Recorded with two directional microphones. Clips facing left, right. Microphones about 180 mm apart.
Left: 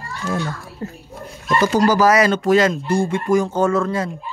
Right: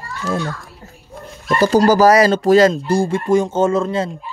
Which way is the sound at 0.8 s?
90° left.